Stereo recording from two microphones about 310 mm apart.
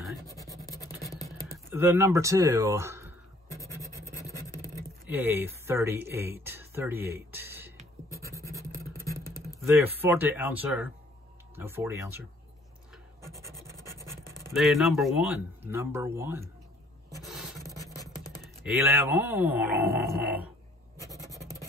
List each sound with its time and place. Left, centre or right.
0.6 s music: centre
1.5 s speech: centre
3.5 s scratch: centre
4.2 s a sound: centre
5.1 s speech: centre
8.4 s vehicle: centre
9.7 s speech: centre
13.9 s speech: centre
17.2 s a sound: centre
18.4 s speech: centre
21.0 s writing: centre